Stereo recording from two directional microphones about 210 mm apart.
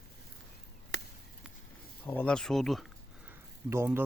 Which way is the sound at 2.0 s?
10° left (ahead or behind).